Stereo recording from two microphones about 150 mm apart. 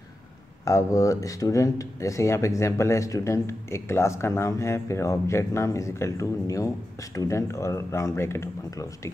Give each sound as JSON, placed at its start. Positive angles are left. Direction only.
{"t": 0.7, "sound": "speech", "side_deg": 20}